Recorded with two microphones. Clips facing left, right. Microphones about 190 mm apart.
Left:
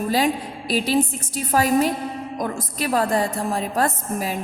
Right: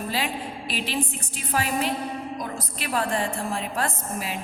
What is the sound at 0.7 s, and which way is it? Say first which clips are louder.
A woman's voice: left 9 dB; 40° left (ahead or behind).